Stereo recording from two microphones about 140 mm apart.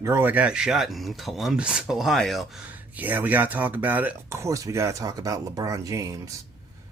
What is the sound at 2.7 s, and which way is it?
Speech, 10° right (ahead or behind).